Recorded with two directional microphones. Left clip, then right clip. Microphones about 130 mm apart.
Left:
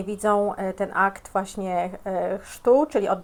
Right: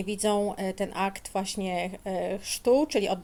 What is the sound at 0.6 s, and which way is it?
Speech, 25° left (ahead or behind).